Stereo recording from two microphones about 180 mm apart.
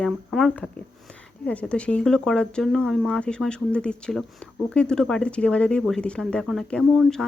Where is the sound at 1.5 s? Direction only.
5° left (ahead or behind).